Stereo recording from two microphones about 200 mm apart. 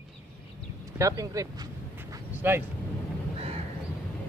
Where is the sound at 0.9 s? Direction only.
15° right (ahead or behind).